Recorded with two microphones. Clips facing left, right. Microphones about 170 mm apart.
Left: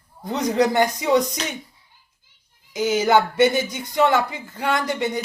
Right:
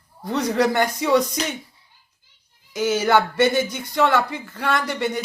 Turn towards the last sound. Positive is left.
turn(degrees=15)  # may be behind; listen again after turning